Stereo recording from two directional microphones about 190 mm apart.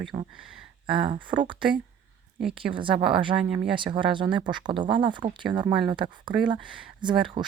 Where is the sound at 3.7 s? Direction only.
25° right (ahead or behind).